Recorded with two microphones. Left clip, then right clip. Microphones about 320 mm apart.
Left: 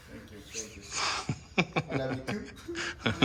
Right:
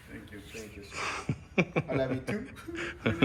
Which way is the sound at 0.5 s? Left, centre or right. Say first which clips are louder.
Left 4 dB; centre.